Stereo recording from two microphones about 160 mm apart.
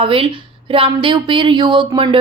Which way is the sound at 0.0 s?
35° right (ahead or behind).